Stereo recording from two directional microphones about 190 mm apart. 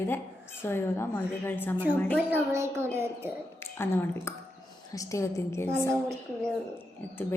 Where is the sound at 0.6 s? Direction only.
10° left (ahead or behind).